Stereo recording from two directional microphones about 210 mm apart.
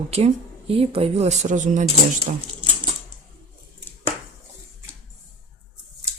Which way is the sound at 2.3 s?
25° right (ahead or behind).